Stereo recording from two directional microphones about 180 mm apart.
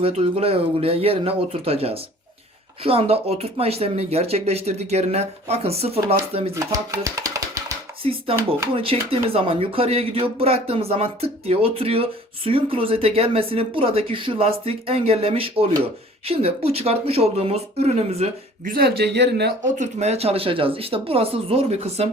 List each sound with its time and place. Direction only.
0.0 s speech: 35° right (ahead or behind)
6.5 s chopping: 15° right (ahead or behind)
8.0 s speech: 30° right (ahead or behind)
18.6 s speech: 55° right (ahead or behind)
19.8 s speech: 40° right (ahead or behind)